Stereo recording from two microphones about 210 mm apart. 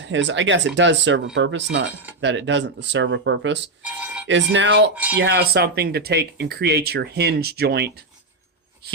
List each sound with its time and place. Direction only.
0.0 s speech: 60° right (ahead or behind)